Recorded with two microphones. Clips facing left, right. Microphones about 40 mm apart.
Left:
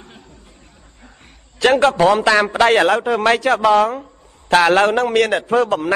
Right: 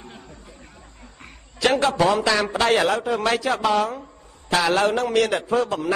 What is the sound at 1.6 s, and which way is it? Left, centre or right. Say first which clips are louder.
A man's voice: left 6 dB; left.